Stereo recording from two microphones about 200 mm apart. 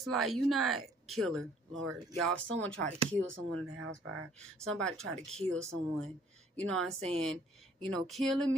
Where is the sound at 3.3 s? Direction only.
90° right.